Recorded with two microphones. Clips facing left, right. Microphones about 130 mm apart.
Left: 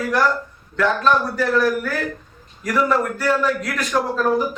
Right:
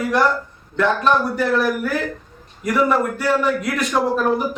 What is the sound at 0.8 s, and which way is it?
A man's voice, 25° right (ahead or behind).